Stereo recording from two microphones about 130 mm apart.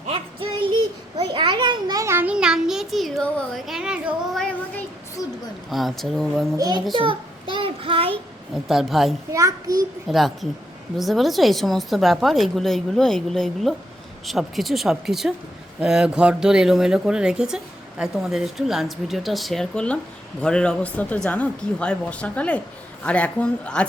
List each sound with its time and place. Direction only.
0.1 s child singing: 40° right (ahead or behind)
1.3 s a sound: 40° right (ahead or behind)
2.1 s child singing: 10° right (ahead or behind)
3.7 s child singing: 5° right (ahead or behind)
5.7 s speech: centre (ahead or behind)
6.6 s a child's voice: 35° right (ahead or behind)
6.9 s child singing: 40° right (ahead or behind)
8.6 s speech: centre (ahead or behind)
9.3 s a child's voice: 30° right (ahead or behind)
10.1 s speech: centre (ahead or behind)